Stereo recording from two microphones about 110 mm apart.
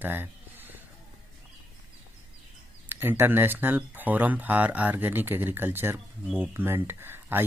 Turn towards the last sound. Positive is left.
turn(degrees=-20)  # may be behind; listen again after turning